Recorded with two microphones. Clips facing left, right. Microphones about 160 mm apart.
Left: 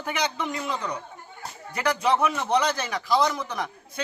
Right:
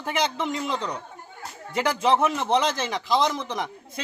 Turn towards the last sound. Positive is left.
turn(degrees=-20)  # may be behind; listen again after turning